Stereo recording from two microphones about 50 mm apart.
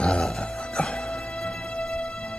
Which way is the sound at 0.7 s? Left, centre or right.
Centre.